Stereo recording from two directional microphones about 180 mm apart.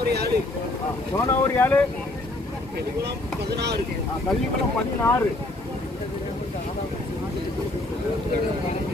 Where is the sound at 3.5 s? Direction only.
65° right (ahead or behind).